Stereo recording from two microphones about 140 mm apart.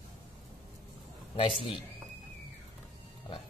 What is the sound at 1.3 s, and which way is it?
Speech, 40° left (ahead or behind).